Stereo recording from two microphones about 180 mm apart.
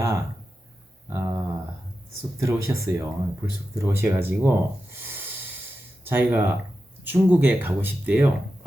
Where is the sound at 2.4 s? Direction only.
15° right (ahead or behind).